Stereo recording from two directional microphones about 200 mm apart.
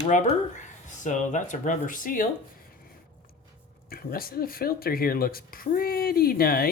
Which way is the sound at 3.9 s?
45° left (ahead or behind).